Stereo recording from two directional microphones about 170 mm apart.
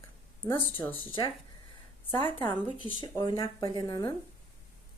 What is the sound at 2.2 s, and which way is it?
Speech, 30° left (ahead or behind).